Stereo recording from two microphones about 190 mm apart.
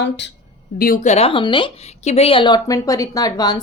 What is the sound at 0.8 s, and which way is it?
A woman's voice, 45° left (ahead or behind).